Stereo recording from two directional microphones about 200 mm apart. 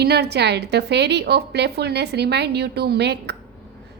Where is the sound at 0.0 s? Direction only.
55° right (ahead or behind).